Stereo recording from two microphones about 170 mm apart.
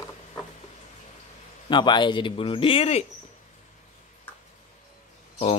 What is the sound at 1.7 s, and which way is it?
Speech, 25° left (ahead or behind).